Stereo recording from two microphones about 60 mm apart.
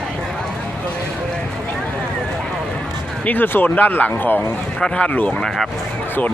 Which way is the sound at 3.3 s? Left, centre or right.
Left.